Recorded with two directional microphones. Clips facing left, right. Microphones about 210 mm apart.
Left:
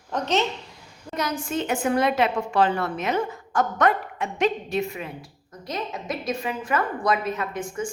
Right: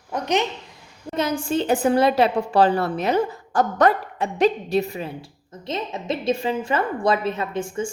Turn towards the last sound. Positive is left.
turn(degrees=-30)  # may be behind; listen again after turning